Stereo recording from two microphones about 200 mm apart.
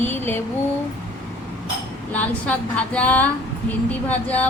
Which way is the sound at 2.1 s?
5° left (ahead or behind).